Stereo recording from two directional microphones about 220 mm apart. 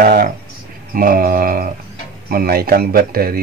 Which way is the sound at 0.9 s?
40° right (ahead or behind).